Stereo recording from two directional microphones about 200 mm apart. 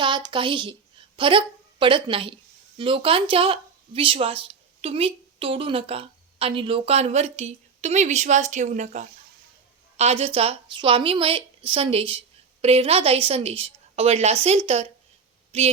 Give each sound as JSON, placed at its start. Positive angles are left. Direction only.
{"t": 0.0, "sound": "a woman's voice", "side_deg": -25}